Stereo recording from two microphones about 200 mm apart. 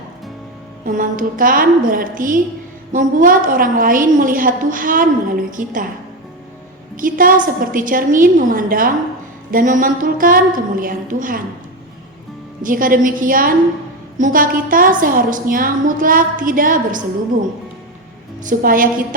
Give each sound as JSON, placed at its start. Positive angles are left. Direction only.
{"t": 0.9, "sound": "a woman's voice", "side_deg": -45}
{"t": 6.9, "sound": "a woman's voice", "side_deg": -45}
{"t": 12.6, "sound": "a woman's voice", "side_deg": -45}
{"t": 18.4, "sound": "a woman's voice", "side_deg": -45}